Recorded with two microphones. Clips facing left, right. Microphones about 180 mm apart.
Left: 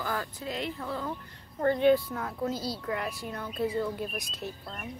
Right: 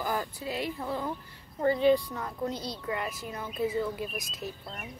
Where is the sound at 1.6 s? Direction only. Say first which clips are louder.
Left 1 dB; 5° right (ahead or behind).